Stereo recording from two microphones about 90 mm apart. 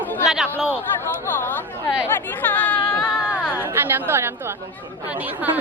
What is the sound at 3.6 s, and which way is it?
Chatter, 25° right (ahead or behind).